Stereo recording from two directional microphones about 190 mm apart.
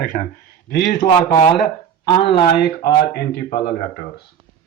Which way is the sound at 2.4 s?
60° left (ahead or behind).